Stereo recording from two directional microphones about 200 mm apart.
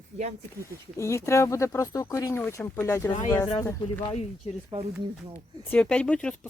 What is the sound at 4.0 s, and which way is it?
Speech, 35° left (ahead or behind).